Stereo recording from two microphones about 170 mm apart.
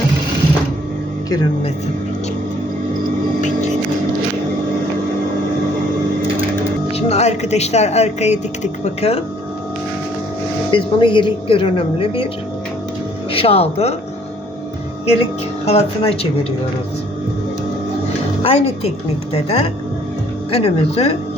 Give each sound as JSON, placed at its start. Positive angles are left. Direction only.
{"t": 6.9, "sound": "speech", "side_deg": 40}
{"t": 10.7, "sound": "speech", "side_deg": 30}
{"t": 13.3, "sound": "speech", "side_deg": 35}
{"t": 15.6, "sound": "speech", "side_deg": 35}
{"t": 18.4, "sound": "speech", "side_deg": 35}